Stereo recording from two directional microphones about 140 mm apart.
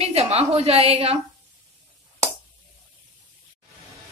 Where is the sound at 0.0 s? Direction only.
45° right (ahead or behind).